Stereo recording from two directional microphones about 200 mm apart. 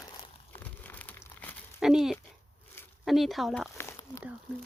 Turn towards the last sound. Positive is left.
turn(degrees=15)  # may be behind; listen again after turning